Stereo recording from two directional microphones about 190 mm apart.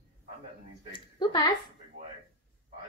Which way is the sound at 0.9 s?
25° left (ahead or behind).